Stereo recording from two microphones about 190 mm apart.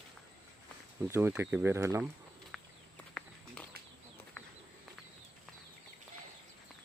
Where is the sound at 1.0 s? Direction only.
10° right (ahead or behind).